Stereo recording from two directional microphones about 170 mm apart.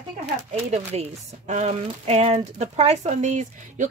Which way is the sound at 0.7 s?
40° right (ahead or behind).